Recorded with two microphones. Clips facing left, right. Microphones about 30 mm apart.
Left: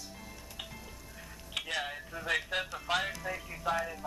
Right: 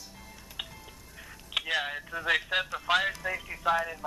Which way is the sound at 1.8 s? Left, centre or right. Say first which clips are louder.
Right 5 dB; right.